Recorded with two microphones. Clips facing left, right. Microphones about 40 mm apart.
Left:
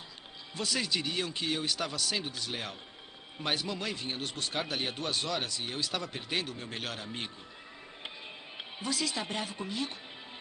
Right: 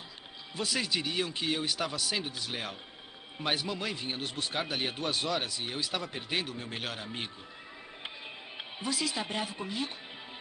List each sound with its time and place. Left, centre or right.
0.6 s speech: centre
8.7 s speech: centre